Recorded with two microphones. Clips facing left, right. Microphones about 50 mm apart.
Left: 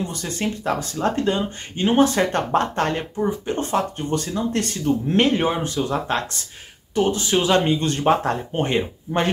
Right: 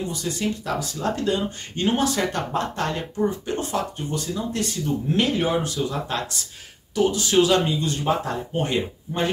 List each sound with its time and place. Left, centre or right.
0.1 s speech: left
7.6 s speech: left